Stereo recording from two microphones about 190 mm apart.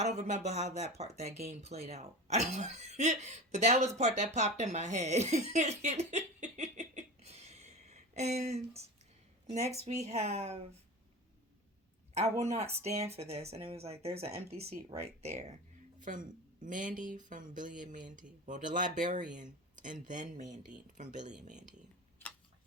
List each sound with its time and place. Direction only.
0.2 s speech: 35° right (ahead or behind)
12.1 s speech: 35° right (ahead or behind)